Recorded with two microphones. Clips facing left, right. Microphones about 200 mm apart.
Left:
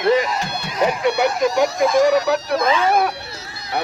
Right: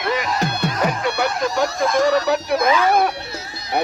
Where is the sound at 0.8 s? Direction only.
15° left (ahead or behind).